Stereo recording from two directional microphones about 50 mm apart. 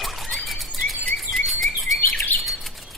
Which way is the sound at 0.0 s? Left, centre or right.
Centre.